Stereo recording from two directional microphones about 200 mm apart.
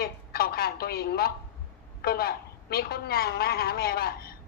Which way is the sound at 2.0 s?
50° left (ahead or behind).